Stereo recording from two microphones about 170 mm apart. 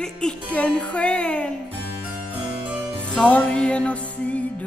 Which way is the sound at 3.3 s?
10° left (ahead or behind).